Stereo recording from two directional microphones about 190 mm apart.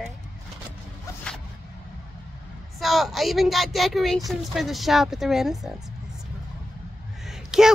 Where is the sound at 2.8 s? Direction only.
Centre (ahead or behind).